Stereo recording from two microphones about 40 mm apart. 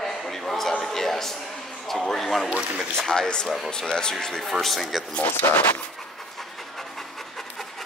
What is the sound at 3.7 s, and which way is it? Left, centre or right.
Speech, centre.